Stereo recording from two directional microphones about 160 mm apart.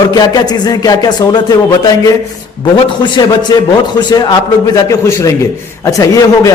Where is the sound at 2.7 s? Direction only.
30° left (ahead or behind).